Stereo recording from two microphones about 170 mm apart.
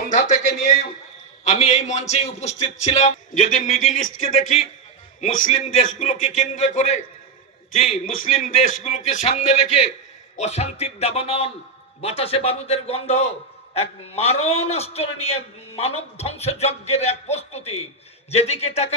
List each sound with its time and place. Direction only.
0.1 s music: 45° left (ahead or behind)
1.5 s a man's voice: 40° left (ahead or behind)
8.1 s a man's voice: 50° left (ahead or behind)